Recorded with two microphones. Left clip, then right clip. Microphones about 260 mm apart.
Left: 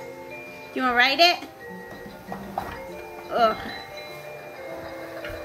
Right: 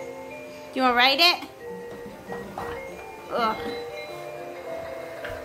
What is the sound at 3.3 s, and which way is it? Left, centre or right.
Speech, centre.